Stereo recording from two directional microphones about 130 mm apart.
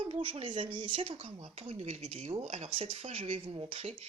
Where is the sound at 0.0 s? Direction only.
40° right (ahead or behind).